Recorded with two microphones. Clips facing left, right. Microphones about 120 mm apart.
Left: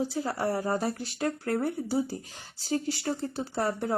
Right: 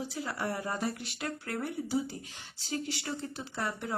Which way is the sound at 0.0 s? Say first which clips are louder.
Left 6 dB; 35° left (ahead or behind).